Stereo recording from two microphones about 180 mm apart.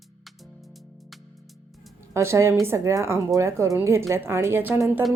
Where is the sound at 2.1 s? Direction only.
15° right (ahead or behind).